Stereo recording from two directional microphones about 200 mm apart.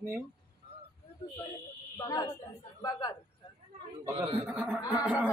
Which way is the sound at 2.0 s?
20° left (ahead or behind).